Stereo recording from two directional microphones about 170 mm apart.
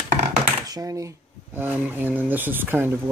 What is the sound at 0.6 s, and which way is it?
Speech, 20° right (ahead or behind).